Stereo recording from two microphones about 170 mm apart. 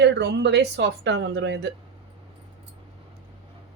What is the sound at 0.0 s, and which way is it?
Speech, 90° right.